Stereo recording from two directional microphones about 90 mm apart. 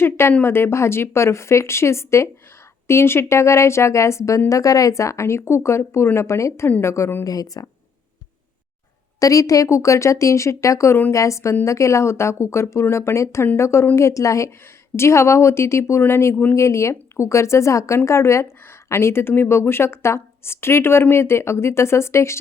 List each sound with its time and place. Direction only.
0.0 s a woman's voice: 25° left (ahead or behind)
6.7 s speech: 20° left (ahead or behind)
7.6 s speech: 40° left (ahead or behind)
9.2 s speech: 40° left (ahead or behind)